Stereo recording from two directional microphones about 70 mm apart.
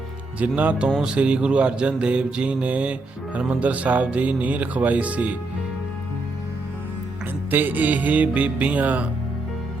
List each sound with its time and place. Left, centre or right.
0.3 s speech: centre
1.0 s mantra: centre
3.3 s speech: right
7.5 s speech: right